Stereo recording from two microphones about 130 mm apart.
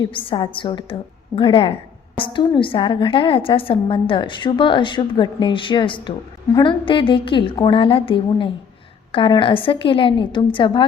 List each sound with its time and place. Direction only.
0.0 s a woman's voice: 40° left (ahead or behind)